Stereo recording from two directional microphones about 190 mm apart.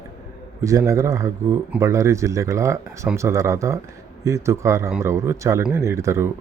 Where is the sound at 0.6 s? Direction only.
15° right (ahead or behind).